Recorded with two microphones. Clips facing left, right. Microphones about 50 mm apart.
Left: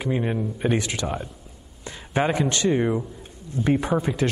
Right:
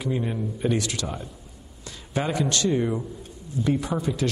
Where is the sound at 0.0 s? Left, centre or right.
Left.